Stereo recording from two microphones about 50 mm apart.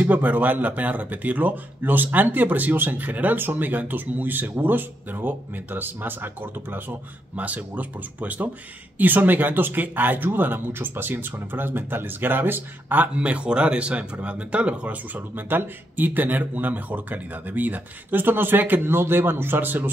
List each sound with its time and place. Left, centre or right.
0.0 s speech: right
7.3 s speech: right
13.1 s speech: right